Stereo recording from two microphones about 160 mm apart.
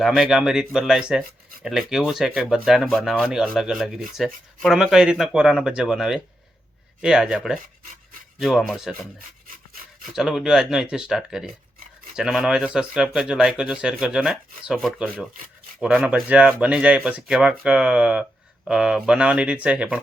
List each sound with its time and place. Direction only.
0.0 s speech: centre (ahead or behind)
10.1 s speech: 5° right (ahead or behind)